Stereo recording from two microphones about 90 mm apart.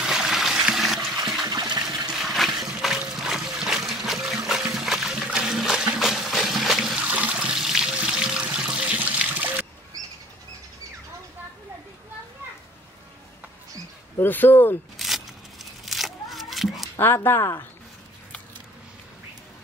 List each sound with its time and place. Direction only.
0.0 s trickle: 5° right (ahead or behind)
1.5 s toilet flush: 45° right (ahead or behind)
2.0 s toilet flush: 5° right (ahead or behind)
3.0 s a sound: 5° right (ahead or behind)
3.9 s trickle: 5° right (ahead or behind)
5.9 s water: 5° right (ahead or behind)
7.0 s water: 15° right (ahead or behind)
9.9 s bird flight: 40° right (ahead or behind)
14.2 s speech: 20° left (ahead or behind)
15.0 s a sound: centre (ahead or behind)
16.9 s speech: 25° left (ahead or behind)